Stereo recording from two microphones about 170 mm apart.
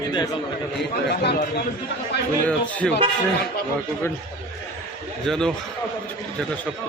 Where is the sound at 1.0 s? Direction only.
75° left (ahead or behind).